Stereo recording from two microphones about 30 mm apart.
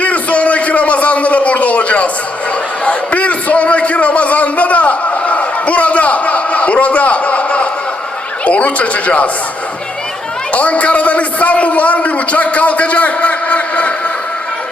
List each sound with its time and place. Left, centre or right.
0.0 s a sound: left
2.8 s a man's voice: left
10.5 s a man's voice: left